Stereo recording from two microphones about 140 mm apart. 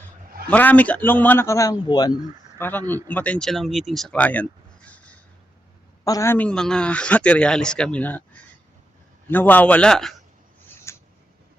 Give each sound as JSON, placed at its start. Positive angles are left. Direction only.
{"t": 0.5, "sound": "speech", "side_deg": 10}
{"t": 2.6, "sound": "speech", "side_deg": 15}
{"t": 6.1, "sound": "speech", "side_deg": 20}
{"t": 10.7, "sound": "a sound", "side_deg": 20}